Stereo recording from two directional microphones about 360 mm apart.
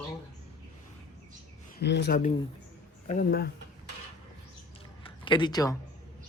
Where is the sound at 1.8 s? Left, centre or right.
Left.